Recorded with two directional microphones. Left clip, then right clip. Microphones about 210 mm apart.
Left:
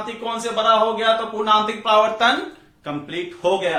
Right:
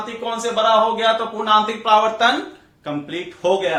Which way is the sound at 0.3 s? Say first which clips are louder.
Right 1 dB; 20° right (ahead or behind).